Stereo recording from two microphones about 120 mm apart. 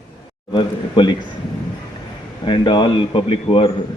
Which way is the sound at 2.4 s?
45° left (ahead or behind).